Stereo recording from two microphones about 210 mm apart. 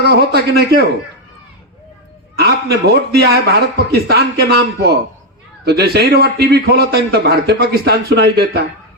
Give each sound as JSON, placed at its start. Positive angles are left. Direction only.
{"t": 0.0, "sound": "a man's voice", "side_deg": -50}
{"t": 2.4, "sound": "a man's voice", "side_deg": -50}